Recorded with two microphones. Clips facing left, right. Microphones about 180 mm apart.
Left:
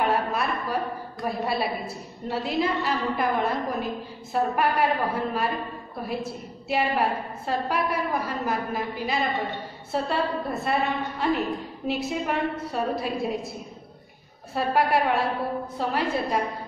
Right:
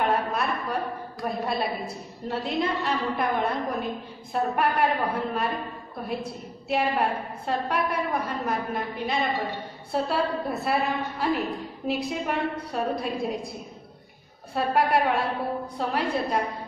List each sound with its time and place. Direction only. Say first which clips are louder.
0.0 s a sound: left 1 dB; 5° left (ahead or behind)
1.2 s a woman's voice: left 1 dB; 5° left (ahead or behind)
6.7 s a woman's voice: even; 5° left (ahead or behind)
14.5 s a woman's voice: even; centre (ahead or behind)